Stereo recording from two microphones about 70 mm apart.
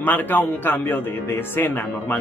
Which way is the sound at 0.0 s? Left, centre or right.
Left.